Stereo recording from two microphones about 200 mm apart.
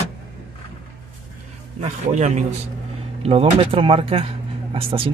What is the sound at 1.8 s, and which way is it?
Speech, 35° right (ahead or behind).